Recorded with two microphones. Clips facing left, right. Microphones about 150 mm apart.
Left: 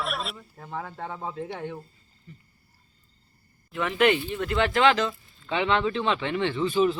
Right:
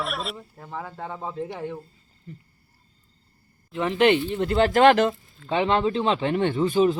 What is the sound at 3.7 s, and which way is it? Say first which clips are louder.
A man's voice: right 3 dB; 30° right (ahead or behind).